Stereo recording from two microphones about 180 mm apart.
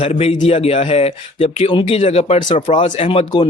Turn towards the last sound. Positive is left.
turn(degrees=30)  # may be behind; listen again after turning